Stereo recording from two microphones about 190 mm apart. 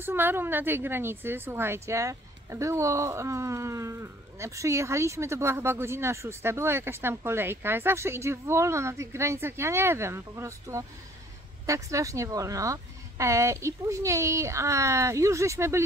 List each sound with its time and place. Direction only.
0.0 s a woman's voice: 10° right (ahead or behind)